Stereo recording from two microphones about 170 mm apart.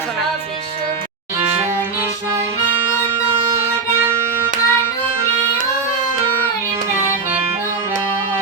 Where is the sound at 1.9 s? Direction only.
15° right (ahead or behind).